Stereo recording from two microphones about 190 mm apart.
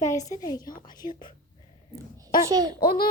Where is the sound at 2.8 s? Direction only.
55° left (ahead or behind).